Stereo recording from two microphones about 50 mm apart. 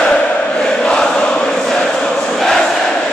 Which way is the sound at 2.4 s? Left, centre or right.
Centre.